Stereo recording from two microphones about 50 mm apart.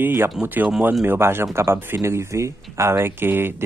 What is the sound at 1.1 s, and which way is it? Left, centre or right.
Speech, right.